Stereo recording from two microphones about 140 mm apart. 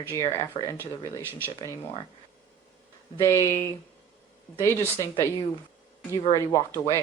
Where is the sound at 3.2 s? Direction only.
20° left (ahead or behind).